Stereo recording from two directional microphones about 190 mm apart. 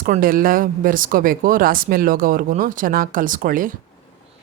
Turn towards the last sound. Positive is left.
turn(degrees=-45)  # may be behind; listen again after turning